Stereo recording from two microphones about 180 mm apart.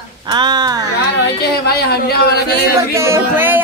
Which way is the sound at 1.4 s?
60° left (ahead or behind).